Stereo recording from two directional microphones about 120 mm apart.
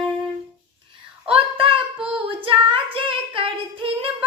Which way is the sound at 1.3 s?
50° right (ahead or behind).